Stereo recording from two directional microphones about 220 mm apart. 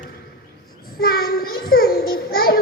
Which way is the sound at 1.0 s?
45° left (ahead or behind).